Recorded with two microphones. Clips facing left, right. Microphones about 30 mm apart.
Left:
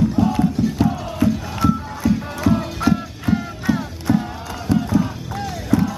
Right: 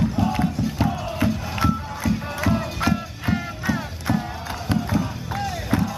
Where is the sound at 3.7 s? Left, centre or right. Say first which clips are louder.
Left 5 dB; centre.